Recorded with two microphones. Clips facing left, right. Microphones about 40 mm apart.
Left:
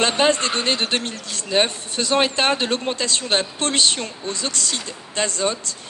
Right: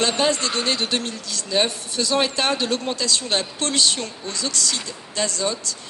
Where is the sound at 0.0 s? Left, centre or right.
Left.